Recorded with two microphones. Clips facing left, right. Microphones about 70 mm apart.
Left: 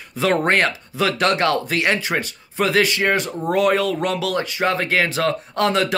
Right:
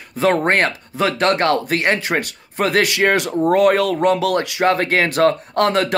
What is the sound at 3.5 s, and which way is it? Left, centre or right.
Speech, right.